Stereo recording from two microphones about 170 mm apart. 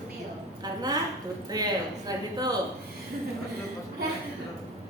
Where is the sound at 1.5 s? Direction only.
20° right (ahead or behind).